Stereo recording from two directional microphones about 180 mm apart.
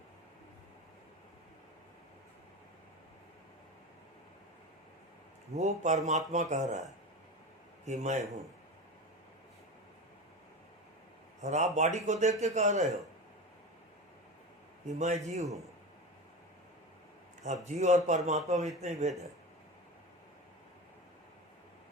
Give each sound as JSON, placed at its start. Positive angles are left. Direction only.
{"t": 5.5, "sound": "a man's voice", "side_deg": -40}
{"t": 7.9, "sound": "a man's voice", "side_deg": -40}
{"t": 11.4, "sound": "a man's voice", "side_deg": -40}
{"t": 14.9, "sound": "a man's voice", "side_deg": -40}
{"t": 17.4, "sound": "a man's voice", "side_deg": -40}